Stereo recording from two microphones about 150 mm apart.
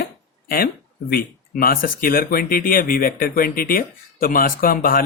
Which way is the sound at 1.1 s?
80° left.